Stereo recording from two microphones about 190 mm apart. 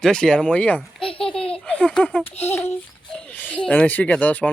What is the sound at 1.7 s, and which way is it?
A child's voice, 5° left (ahead or behind).